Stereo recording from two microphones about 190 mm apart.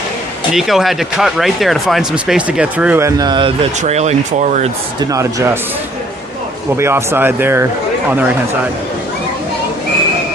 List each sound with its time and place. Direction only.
0.5 s speech: centre (ahead or behind); by 4.7 s 40° right (ahead or behind)
4.9 s speech: 15° right (ahead or behind)
6.7 s speech: 15° right (ahead or behind)